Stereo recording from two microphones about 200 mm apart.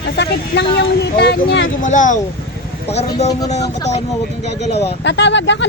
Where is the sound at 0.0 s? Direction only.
55° left (ahead or behind).